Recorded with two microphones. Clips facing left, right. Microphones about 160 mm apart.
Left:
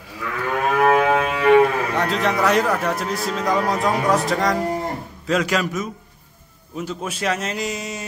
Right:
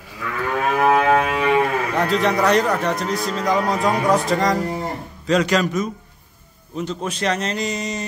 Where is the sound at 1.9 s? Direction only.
Centre (ahead or behind).